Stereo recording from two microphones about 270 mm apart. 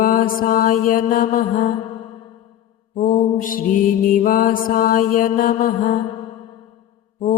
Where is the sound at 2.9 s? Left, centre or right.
Left.